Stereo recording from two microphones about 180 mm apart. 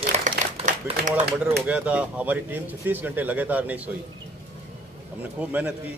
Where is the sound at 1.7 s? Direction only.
5° right (ahead or behind).